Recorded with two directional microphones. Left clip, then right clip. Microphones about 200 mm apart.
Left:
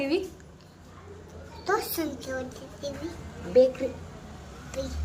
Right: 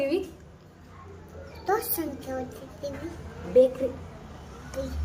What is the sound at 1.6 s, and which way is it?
A woman's voice, 15° right (ahead or behind).